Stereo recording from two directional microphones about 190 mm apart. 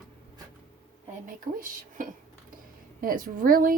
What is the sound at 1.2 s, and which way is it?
Speech, 45° right (ahead or behind).